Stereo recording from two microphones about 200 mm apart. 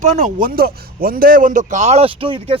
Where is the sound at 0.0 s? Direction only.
40° right (ahead or behind).